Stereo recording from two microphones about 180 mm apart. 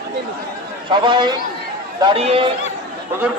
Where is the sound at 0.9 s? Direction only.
25° right (ahead or behind).